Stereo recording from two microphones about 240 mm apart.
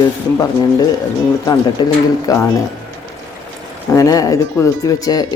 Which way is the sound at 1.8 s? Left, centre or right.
Centre.